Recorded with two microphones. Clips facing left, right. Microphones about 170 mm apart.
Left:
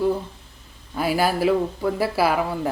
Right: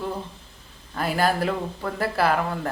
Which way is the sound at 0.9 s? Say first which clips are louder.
Left 2 dB; 5° left (ahead or behind).